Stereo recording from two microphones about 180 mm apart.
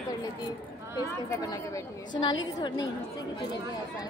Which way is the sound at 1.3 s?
20° left (ahead or behind).